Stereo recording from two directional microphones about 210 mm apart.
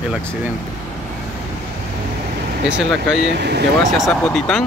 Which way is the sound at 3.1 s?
55° right (ahead or behind).